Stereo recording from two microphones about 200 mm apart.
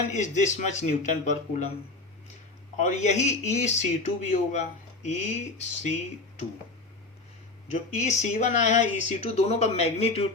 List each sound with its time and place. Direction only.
0.1 s speech: 35° left (ahead or behind)
2.7 s speech: 35° left (ahead or behind)
7.7 s speech: 35° left (ahead or behind)